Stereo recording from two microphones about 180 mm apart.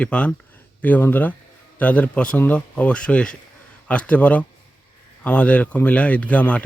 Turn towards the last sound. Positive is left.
turn(degrees=5)  # may be behind; listen again after turning